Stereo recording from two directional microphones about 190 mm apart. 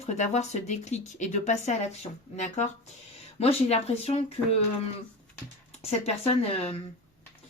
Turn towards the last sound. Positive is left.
turn(degrees=30)  # may be behind; listen again after turning